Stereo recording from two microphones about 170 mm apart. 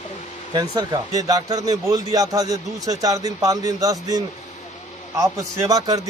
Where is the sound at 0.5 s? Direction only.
25° right (ahead or behind).